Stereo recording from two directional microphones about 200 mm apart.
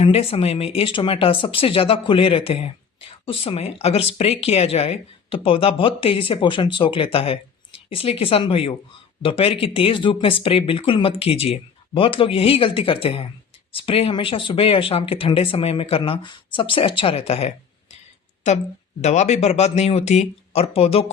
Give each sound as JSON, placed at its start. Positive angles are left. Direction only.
{"t": 0.0, "sound": "speech", "side_deg": 30}